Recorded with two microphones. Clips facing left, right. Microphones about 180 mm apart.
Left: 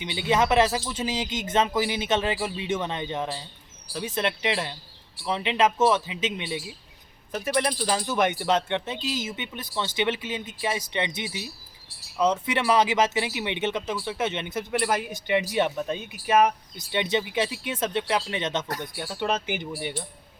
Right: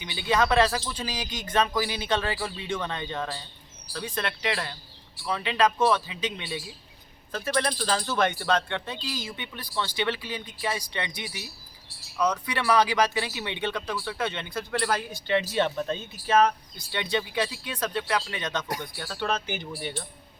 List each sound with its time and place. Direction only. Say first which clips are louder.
0.0 s speech: left 2 dB; 20° left (ahead or behind)